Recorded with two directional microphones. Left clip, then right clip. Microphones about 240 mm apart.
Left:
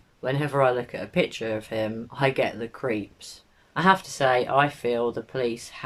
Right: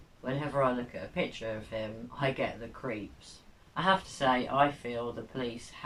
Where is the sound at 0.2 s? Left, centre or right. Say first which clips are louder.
Left 7 dB; left.